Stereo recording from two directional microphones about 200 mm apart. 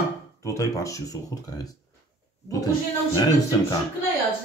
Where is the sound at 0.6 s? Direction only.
15° left (ahead or behind).